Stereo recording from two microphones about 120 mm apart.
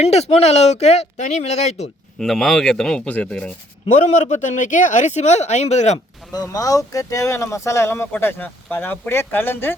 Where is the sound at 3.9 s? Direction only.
85° left.